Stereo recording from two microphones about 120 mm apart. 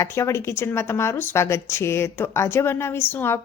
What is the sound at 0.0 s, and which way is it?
Speech, 25° left (ahead or behind).